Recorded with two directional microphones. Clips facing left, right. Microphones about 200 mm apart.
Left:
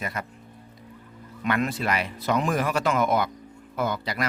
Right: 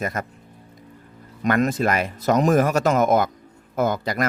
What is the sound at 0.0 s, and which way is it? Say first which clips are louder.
Speech: right 6 dB; 45° right (ahead or behind).